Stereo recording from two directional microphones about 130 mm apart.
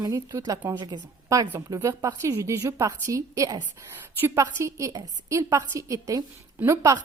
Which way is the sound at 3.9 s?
15° right (ahead or behind).